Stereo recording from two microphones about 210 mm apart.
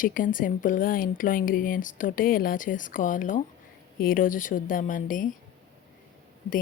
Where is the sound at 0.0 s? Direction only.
40° left (ahead or behind).